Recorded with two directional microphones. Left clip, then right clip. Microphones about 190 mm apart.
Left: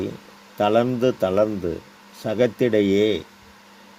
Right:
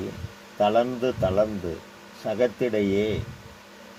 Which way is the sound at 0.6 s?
60° left (ahead or behind).